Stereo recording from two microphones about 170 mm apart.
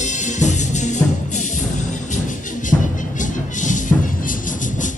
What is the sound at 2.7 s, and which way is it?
Music, 50° left (ahead or behind).